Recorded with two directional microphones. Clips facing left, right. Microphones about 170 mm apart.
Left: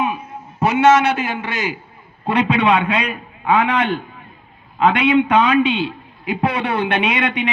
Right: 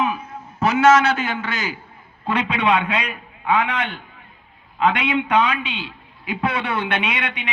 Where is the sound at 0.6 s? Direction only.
30° left (ahead or behind).